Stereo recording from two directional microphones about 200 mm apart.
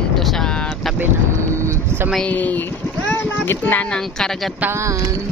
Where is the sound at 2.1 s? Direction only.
5° left (ahead or behind).